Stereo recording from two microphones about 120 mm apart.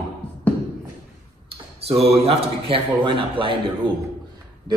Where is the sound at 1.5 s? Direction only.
55° right (ahead or behind).